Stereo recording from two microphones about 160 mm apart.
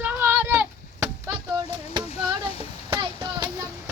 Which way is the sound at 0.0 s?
10° right (ahead or behind).